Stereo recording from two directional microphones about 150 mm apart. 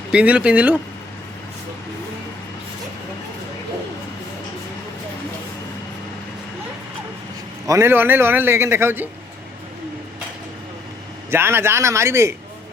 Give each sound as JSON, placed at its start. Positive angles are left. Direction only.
{"t": 0.1, "sound": "a man's voice", "side_deg": -5}
{"t": 7.7, "sound": "a man's voice", "side_deg": -15}
{"t": 11.3, "sound": "a man's voice", "side_deg": -15}